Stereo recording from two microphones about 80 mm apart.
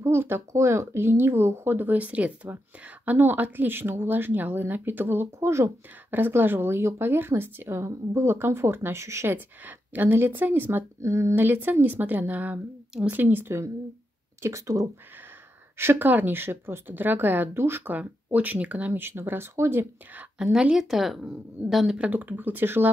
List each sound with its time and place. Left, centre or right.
0.0 s a woman's voice: right
9.3 s a woman's voice: right
11.0 s a woman's voice: right
14.4 s speech: right
15.8 s a woman's voice: right
17.9 s a woman's voice: centre
20.3 s speech: centre
22.1 s a woman's voice: right